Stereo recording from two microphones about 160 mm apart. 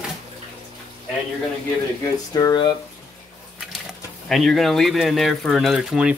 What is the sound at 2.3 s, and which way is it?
Speech, 25° left (ahead or behind).